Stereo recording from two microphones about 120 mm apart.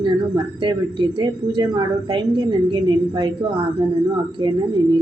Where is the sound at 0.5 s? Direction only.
40° right (ahead or behind).